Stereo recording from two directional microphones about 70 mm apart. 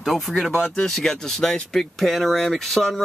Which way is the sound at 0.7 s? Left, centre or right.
Centre.